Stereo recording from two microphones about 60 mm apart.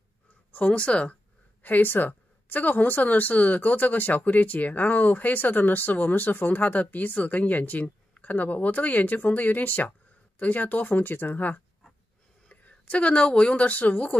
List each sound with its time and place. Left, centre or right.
0.5 s speech: left
1.6 s a woman's voice: left